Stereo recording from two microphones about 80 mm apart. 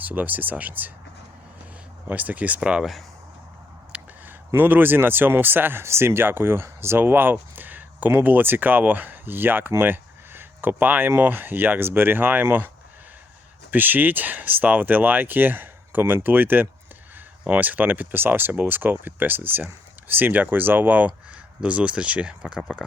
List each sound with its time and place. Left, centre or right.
0.0 s speech: centre
2.0 s speech: centre
3.9 s a sound: centre
4.3 s speech: right; by 22.9 s centre